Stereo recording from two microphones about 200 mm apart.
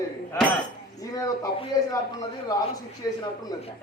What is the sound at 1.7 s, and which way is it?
Speech, 15° left (ahead or behind).